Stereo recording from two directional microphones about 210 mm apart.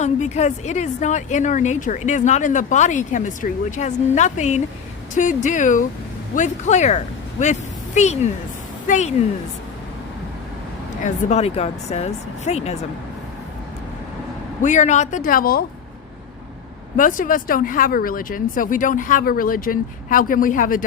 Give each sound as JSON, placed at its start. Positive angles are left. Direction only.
{"t": 0.0, "sound": "a woman's voice", "side_deg": 35}
{"t": 11.0, "sound": "a woman's voice", "side_deg": 35}
{"t": 14.6, "sound": "a woman's voice", "side_deg": 35}
{"t": 17.0, "sound": "a woman's voice", "side_deg": 40}